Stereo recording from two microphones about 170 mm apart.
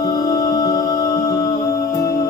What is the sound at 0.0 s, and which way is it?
Music, 20° left (ahead or behind).